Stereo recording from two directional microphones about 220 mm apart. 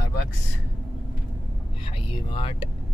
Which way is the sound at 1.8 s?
25° left (ahead or behind).